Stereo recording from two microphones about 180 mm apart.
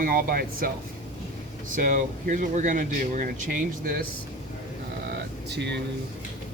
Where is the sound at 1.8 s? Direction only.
45° right (ahead or behind).